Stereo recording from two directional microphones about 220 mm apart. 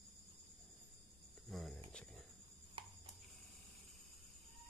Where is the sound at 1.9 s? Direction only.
5° left (ahead or behind).